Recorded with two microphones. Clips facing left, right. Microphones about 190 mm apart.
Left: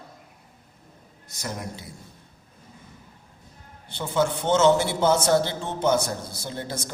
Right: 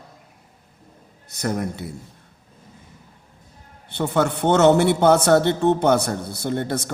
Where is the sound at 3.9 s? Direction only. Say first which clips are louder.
Right 3 dB; 65° right (ahead or behind).